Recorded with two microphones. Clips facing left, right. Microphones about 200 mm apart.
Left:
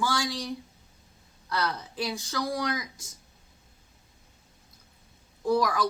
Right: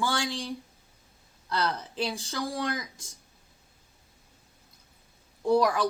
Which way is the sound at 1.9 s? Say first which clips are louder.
Even; 30° right (ahead or behind).